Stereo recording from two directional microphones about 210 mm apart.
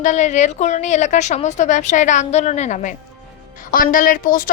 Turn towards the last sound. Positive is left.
turn(degrees=40)  # may be behind; listen again after turning